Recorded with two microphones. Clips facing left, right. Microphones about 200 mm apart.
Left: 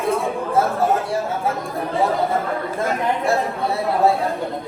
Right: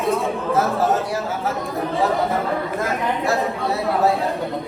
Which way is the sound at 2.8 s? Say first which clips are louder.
Left 5 dB; 30° left (ahead or behind).